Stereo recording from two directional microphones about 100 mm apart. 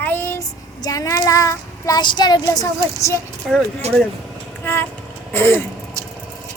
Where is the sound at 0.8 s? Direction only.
35° left (ahead or behind).